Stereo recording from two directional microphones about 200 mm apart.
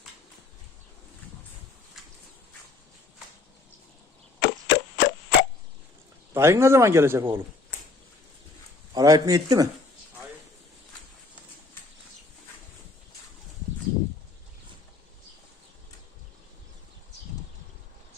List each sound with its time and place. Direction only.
4.4 s a sound: 60° left (ahead or behind)
6.3 s a man's voice: 15° right (ahead or behind)
8.9 s speech: 20° right (ahead or behind)